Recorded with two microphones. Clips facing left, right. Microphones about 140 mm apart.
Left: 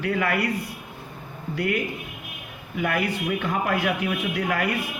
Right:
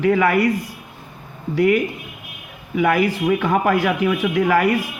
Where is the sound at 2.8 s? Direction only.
90° right.